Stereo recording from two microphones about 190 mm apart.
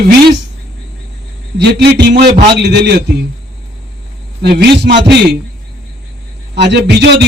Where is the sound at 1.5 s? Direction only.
65° right (ahead or behind).